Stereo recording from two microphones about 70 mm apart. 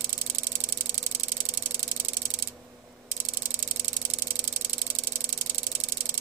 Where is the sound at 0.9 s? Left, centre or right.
Right.